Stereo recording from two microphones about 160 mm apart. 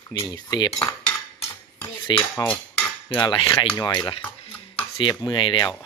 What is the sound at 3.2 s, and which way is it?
Speech, 35° left (ahead or behind).